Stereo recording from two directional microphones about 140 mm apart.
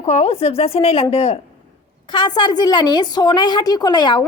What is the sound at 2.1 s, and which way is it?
A woman's voice, 30° left (ahead or behind).